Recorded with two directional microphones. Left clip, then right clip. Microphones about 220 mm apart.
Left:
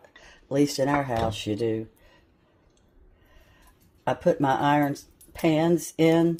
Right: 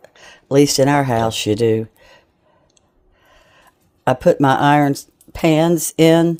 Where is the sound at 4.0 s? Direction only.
45° right (ahead or behind).